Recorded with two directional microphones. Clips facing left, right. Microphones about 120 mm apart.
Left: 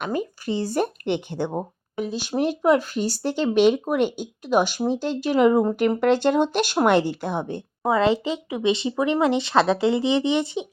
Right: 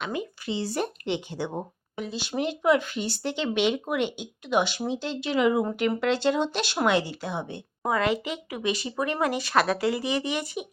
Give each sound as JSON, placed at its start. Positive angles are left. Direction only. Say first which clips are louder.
{"t": 0.0, "sound": "speech", "louder": "left 5 dB", "side_deg": 45}
{"t": 7.9, "sound": "speech", "louder": "left 5 dB", "side_deg": 25}